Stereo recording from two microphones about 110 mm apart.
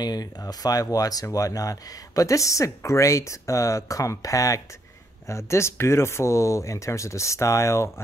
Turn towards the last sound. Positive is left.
turn(degrees=25)  # may be behind; listen again after turning